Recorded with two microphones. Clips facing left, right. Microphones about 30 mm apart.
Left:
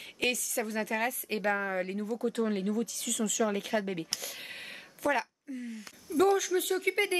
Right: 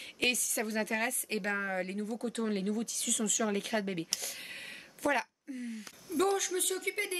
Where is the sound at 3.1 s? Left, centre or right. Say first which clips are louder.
Left 3 dB; centre.